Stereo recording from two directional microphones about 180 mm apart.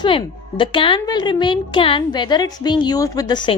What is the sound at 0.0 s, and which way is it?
A woman's voice, 25° left (ahead or behind).